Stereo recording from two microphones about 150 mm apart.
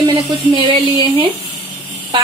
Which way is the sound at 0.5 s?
35° right (ahead or behind).